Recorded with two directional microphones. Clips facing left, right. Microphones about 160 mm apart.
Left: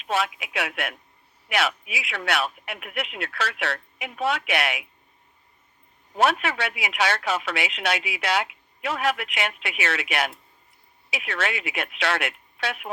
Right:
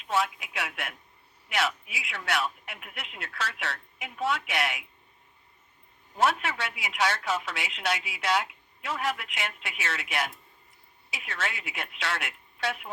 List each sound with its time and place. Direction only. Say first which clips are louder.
0.0 s speech: left 2 dB; 75° left (ahead or behind)
6.1 s speech: left 4 dB; 70° left (ahead or behind)